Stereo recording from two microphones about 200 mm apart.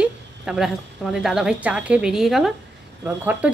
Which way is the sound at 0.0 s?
5° right (ahead or behind).